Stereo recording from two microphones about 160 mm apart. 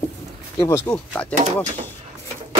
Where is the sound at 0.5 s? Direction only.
15° left (ahead or behind).